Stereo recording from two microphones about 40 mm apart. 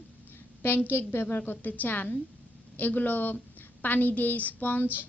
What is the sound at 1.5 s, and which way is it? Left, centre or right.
A woman's voice, left.